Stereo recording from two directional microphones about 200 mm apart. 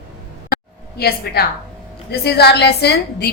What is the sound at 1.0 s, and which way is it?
A woman's voice, 50° left (ahead or behind).